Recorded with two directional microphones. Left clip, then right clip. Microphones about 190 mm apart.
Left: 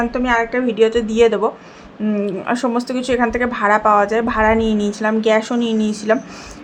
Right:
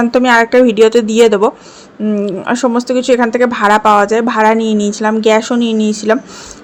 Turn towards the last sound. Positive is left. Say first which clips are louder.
# right 5 dB
turn(degrees=-25)  # may be behind; listen again after turning